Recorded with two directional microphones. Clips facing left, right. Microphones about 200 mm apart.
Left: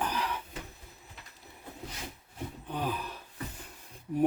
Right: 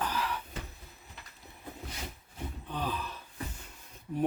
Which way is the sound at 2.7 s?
15° left (ahead or behind).